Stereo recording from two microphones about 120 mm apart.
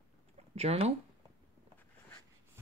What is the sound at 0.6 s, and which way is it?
Speech, 60° right (ahead or behind).